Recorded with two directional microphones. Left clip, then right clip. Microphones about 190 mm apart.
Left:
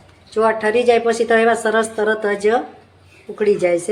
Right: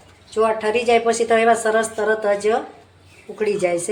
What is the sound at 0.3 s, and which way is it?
A woman's voice, 30° left (ahead or behind).